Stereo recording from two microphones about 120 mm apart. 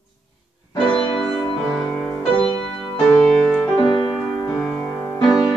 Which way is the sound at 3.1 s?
5° left (ahead or behind).